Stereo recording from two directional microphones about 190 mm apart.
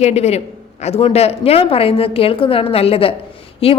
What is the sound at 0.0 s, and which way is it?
A woman's voice, 35° left (ahead or behind).